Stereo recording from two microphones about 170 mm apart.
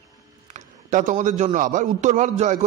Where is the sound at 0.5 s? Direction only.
45° right (ahead or behind).